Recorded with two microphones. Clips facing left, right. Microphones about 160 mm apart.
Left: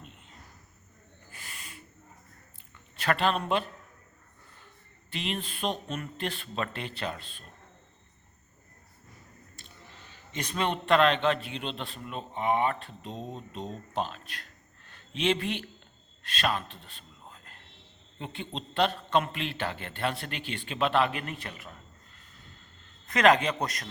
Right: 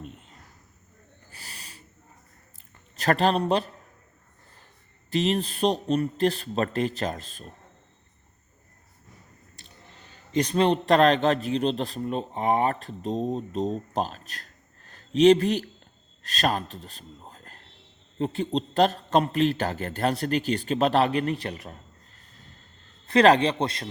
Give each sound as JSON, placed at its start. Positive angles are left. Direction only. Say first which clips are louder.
{"t": 0.0, "sound": "a sound", "louder": "right 9 dB", "side_deg": -45}
{"t": 1.3, "sound": "owl", "louder": "even", "side_deg": -35}
{"t": 2.9, "sound": "a man's voice", "louder": "right 5 dB", "side_deg": -40}
{"t": 5.1, "sound": "a man's voice", "louder": "right 10 dB", "side_deg": -40}
{"t": 10.3, "sound": "a man's voice", "louder": "right 9 dB", "side_deg": -35}